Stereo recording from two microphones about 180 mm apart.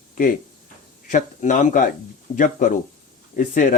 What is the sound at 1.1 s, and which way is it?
Speech, 45° left (ahead or behind).